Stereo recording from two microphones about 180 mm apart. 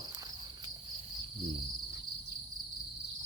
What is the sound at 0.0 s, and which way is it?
Insect, 20° right (ahead or behind).